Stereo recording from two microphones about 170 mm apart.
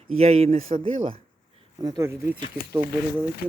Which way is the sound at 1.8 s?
20° right (ahead or behind).